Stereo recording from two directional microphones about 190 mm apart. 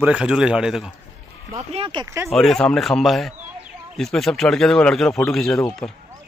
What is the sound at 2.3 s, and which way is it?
Speech, centre (ahead or behind).